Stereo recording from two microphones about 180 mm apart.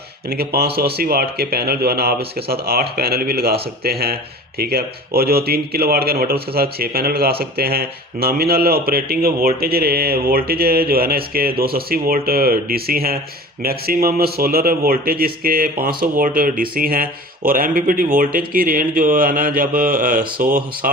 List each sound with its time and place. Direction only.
0.3 s a man's voice: 60° right (ahead or behind)